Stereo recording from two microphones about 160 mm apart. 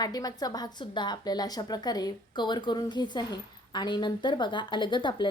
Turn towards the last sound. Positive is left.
turn(degrees=30)  # may be behind; listen again after turning